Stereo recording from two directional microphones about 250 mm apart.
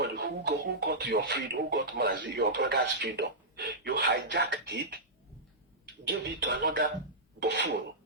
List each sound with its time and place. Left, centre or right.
0.0 s speech: right
6.1 s speech: right
7.3 s dishes: right